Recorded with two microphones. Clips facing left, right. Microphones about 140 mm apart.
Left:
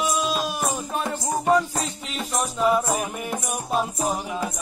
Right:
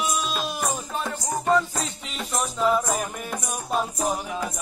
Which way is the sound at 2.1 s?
Centre (ahead or behind).